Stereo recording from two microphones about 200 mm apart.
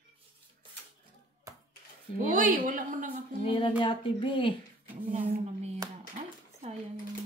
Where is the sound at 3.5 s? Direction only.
25° left (ahead or behind).